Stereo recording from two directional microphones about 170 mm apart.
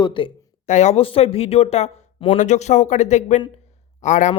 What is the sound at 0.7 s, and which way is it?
A man's voice, 45° left (ahead or behind).